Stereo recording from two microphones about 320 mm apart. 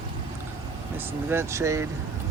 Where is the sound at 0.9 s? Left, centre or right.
Centre.